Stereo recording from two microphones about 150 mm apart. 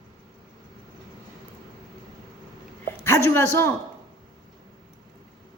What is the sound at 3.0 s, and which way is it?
Speech, 15° left (ahead or behind).